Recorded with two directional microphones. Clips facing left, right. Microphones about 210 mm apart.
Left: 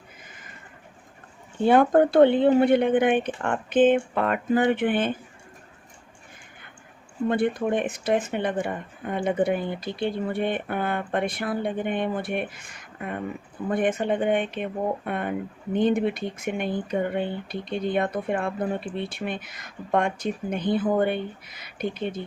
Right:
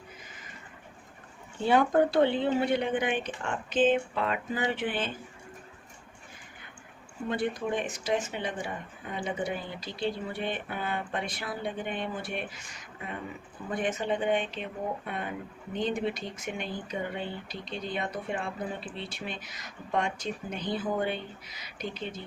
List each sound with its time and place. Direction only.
1.6 s speech: 50° left (ahead or behind)
7.3 s speech: 55° left (ahead or behind)